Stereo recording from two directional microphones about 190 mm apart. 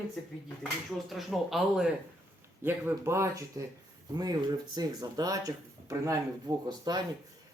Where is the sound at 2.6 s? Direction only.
10° right (ahead or behind).